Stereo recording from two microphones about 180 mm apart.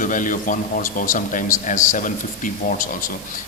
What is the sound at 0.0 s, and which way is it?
A man's voice, 45° left (ahead or behind).